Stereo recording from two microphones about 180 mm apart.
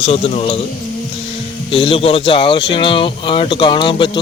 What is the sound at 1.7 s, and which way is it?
Speech, 30° left (ahead or behind).